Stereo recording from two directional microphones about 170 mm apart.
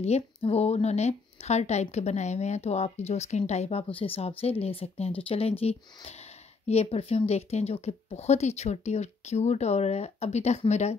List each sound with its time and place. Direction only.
0.0 s speech: 40° left (ahead or behind)